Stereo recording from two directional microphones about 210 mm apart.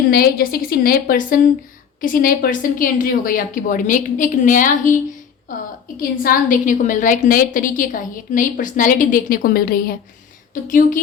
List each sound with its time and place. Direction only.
0.1 s a woman's voice: 45° left (ahead or behind)
6.0 s a woman's voice: 40° left (ahead or behind)